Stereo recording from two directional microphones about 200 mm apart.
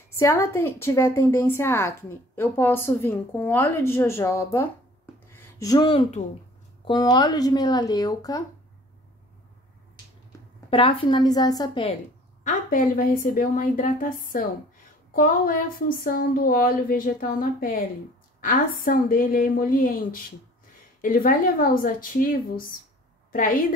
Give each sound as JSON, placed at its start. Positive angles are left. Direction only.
{"t": 0.2, "sound": "a woman's voice", "side_deg": 10}
{"t": 5.3, "sound": "a sound", "side_deg": 15}
{"t": 6.8, "sound": "speech", "side_deg": 20}
{"t": 10.7, "sound": "speech", "side_deg": 25}
{"t": 12.4, "sound": "a woman's voice", "side_deg": 40}